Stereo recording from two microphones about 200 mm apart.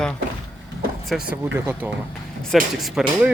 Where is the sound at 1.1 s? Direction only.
10° right (ahead or behind).